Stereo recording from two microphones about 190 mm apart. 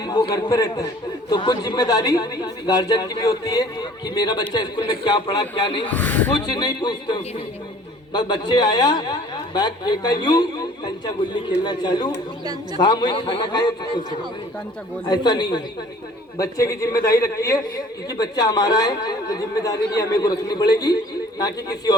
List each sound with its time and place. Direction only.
0.0 s speech: 20° left (ahead or behind)
5.9 s a man's voice: 10° left (ahead or behind)
6.5 s a man's voice: 20° left (ahead or behind)